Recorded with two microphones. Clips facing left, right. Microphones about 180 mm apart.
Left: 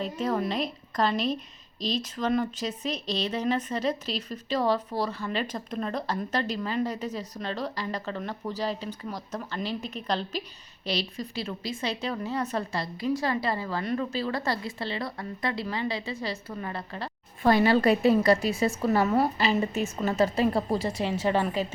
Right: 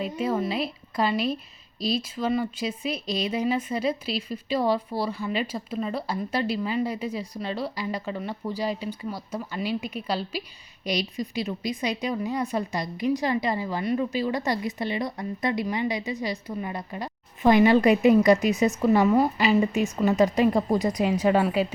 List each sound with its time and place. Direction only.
0.0 s speech: 10° right (ahead or behind)